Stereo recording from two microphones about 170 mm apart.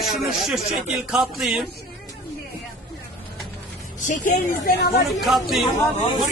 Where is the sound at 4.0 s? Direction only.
50° left (ahead or behind).